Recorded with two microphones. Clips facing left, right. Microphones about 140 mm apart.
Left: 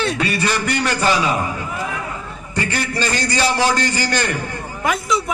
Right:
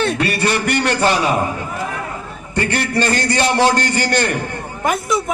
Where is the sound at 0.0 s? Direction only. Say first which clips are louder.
Right 2 dB; 55° right (ahead or behind).